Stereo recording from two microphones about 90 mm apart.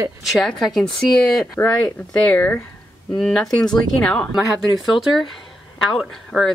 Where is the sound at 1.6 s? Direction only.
20° left (ahead or behind).